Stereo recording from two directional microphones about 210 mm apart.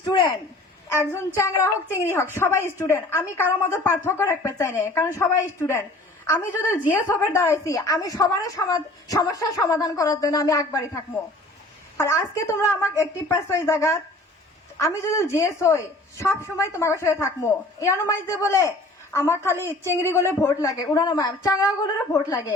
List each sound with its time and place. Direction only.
0.0 s a woman's voice: 20° left (ahead or behind)